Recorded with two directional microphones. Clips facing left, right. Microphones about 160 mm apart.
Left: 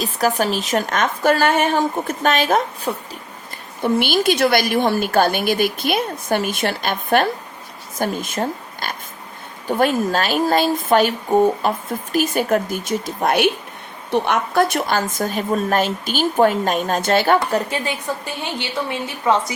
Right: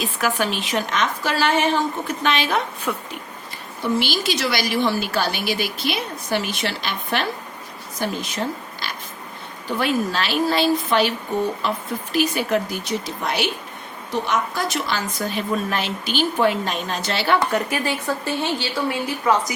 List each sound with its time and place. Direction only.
0.0 s speech: 40° left (ahead or behind)
3.8 s speech: 55° left (ahead or behind)
17.7 s speech: 25° left (ahead or behind)